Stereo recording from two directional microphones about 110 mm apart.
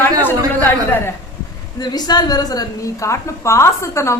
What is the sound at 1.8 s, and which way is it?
A woman's voice, 40° left (ahead or behind).